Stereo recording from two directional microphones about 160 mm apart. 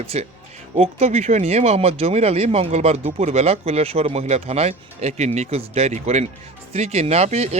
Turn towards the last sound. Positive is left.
turn(degrees=-45)  # may be behind; listen again after turning